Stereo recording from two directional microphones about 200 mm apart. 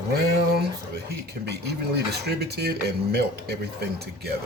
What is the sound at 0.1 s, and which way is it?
Speech, 50° right (ahead or behind).